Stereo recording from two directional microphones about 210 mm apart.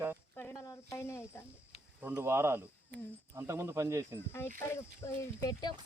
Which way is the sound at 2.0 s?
10° right (ahead or behind).